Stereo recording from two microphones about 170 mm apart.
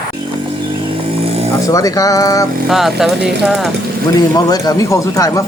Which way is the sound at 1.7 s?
20° left (ahead or behind).